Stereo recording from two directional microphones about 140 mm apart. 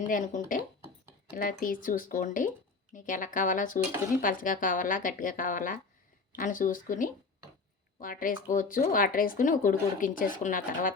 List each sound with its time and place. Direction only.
0.1 s a woman's voice: 75° left (ahead or behind)
1.3 s a woman's voice: 85° left